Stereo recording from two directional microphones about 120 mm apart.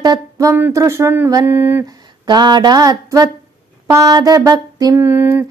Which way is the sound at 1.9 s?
35° right (ahead or behind).